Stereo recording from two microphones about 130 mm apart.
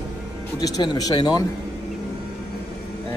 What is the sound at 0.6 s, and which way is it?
Speech, 30° left (ahead or behind).